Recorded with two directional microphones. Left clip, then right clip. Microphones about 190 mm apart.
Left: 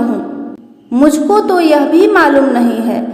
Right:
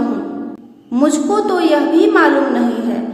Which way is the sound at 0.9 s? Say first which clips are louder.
Left 5 dB; 25° left (ahead or behind).